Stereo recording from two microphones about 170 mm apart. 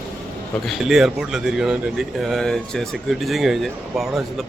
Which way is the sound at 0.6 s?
Centre (ahead or behind).